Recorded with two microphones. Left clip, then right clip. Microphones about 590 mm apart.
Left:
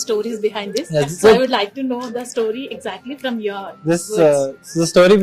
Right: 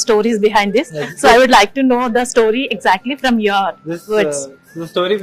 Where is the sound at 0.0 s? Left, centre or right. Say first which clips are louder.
Right 7 dB; right.